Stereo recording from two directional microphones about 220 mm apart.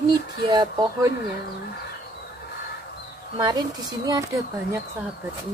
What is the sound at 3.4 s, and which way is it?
Speech, 20° right (ahead or behind).